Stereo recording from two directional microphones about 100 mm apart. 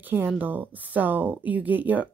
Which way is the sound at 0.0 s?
20° right (ahead or behind).